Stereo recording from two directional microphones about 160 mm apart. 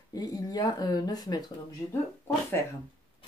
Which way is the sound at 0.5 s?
25° left (ahead or behind).